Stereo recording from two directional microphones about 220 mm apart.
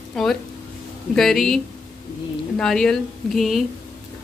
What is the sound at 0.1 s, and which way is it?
Speech, centre (ahead or behind).